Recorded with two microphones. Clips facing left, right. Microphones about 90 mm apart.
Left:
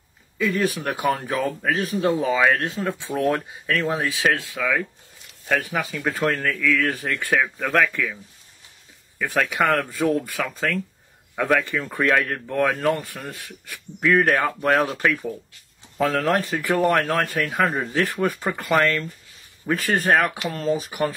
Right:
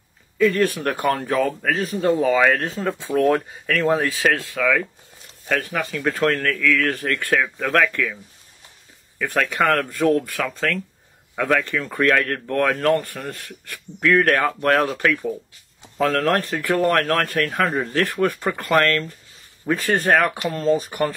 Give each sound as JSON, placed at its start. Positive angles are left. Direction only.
{"t": 0.4, "sound": "a man's voice", "side_deg": 5}
{"t": 9.2, "sound": "a man's voice", "side_deg": 5}
{"t": 19.6, "sound": "speech", "side_deg": -20}
{"t": 20.0, "sound": "a man's voice", "side_deg": 5}